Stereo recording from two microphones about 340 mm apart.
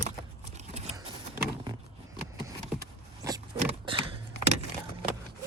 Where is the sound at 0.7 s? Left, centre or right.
Centre.